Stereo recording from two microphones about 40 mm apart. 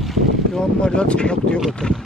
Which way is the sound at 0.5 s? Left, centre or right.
Left.